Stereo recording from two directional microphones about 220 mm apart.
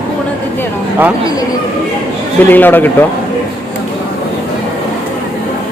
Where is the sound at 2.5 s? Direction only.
10° left (ahead or behind).